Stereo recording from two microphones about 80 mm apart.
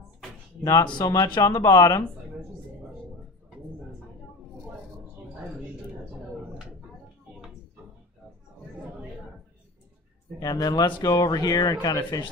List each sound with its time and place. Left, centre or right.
0.6 s speech: left
0.9 s speech: left
10.4 s speech: left